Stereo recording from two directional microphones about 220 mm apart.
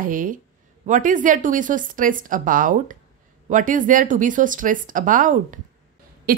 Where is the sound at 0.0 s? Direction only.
40° right (ahead or behind).